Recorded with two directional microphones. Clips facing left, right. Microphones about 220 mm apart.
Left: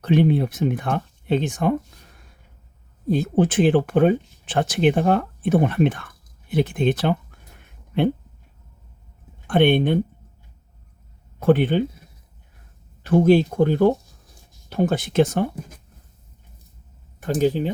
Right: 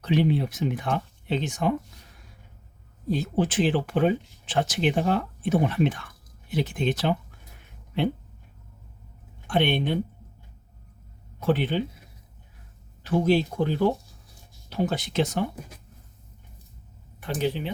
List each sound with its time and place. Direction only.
0.0 s speech: 55° left (ahead or behind)
3.1 s speech: 55° left (ahead or behind)
9.5 s speech: 55° left (ahead or behind)
11.3 s speech: 55° left (ahead or behind)
13.0 s speech: 50° left (ahead or behind)
17.2 s speech: 45° left (ahead or behind)